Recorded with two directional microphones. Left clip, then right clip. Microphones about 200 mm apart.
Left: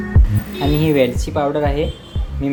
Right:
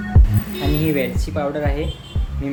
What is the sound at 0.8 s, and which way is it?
Music, 30° left (ahead or behind).